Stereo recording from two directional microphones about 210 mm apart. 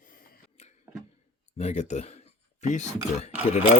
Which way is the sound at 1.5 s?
30° left (ahead or behind).